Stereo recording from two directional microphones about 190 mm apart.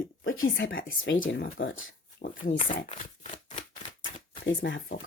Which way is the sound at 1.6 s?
90° left.